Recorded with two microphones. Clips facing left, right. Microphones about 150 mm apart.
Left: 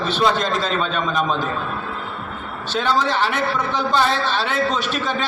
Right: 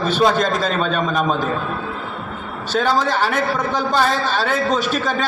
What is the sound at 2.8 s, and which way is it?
A man's voice, 45° right (ahead or behind).